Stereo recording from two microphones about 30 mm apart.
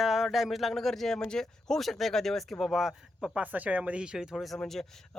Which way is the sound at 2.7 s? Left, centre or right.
Centre.